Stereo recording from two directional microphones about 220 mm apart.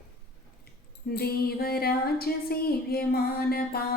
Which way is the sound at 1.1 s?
45° left (ahead or behind).